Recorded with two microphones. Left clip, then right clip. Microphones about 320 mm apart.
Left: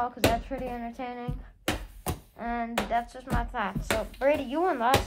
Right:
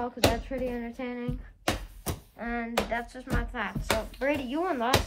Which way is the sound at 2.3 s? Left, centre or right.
Centre.